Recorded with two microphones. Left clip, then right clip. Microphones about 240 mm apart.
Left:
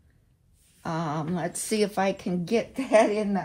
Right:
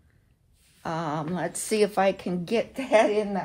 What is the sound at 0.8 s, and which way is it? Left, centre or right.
A woman's voice, right.